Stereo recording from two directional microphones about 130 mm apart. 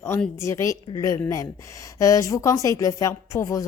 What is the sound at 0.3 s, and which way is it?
A woman's voice, 20° left (ahead or behind).